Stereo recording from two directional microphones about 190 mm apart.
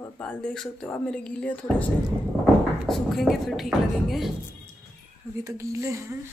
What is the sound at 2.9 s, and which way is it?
Speech, centre (ahead or behind).